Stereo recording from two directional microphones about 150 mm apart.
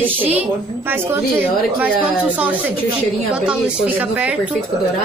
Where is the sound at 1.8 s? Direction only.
10° right (ahead or behind).